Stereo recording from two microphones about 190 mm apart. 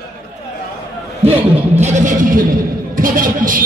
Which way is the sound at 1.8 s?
40° right (ahead or behind).